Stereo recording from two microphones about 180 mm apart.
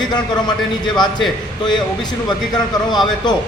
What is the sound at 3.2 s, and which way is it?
Speech, 25° left (ahead or behind).